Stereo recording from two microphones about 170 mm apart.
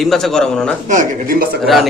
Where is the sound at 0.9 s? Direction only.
55° right (ahead or behind).